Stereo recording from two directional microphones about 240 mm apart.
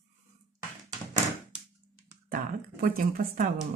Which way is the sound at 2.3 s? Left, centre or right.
Right.